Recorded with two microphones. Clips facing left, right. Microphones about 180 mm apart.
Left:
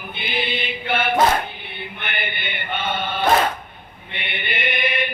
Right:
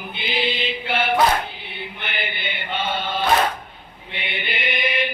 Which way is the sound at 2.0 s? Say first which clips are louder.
Left 1 dB; 55° left (ahead or behind).